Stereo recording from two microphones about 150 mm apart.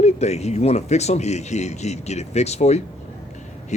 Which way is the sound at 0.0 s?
45° left (ahead or behind).